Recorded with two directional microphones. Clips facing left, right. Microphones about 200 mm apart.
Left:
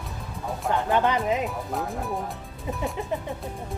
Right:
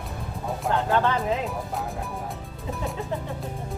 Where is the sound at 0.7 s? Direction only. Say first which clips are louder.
Left 1 dB; 15° left (ahead or behind).